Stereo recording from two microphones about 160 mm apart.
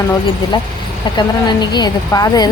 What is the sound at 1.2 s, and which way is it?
Speech, 25° left (ahead or behind).